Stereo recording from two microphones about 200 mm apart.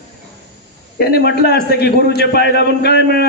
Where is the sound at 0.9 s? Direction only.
55° left (ahead or behind).